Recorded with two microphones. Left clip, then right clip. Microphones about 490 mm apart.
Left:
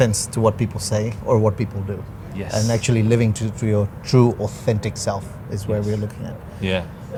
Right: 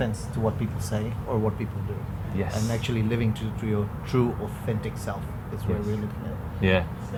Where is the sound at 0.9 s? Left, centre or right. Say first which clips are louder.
Left 12 dB; left.